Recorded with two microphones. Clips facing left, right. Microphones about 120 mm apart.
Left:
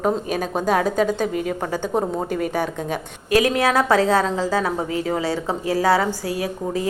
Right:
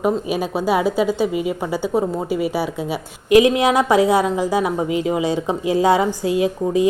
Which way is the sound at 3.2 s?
20° right (ahead or behind).